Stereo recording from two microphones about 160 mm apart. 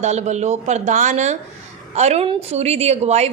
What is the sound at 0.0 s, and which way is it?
A woman's voice, 45° right (ahead or behind).